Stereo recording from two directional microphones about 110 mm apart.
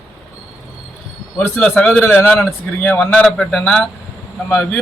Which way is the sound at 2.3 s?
Centre (ahead or behind).